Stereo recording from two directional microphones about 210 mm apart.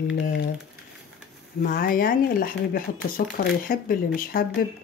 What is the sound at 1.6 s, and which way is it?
Speech, 45° left (ahead or behind).